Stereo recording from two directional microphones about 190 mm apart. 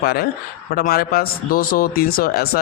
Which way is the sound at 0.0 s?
55° left (ahead or behind).